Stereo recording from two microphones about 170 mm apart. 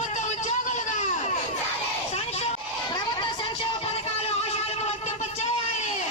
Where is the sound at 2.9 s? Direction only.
25° left (ahead or behind).